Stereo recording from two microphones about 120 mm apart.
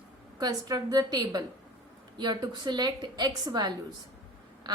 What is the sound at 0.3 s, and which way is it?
A woman's voice, 35° right (ahead or behind).